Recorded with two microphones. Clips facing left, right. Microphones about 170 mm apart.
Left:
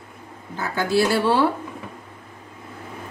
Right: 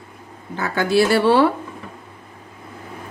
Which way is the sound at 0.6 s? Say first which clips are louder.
Right 3 dB; 75° right (ahead or behind).